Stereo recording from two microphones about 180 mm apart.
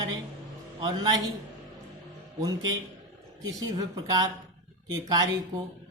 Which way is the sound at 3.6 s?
20° right (ahead or behind).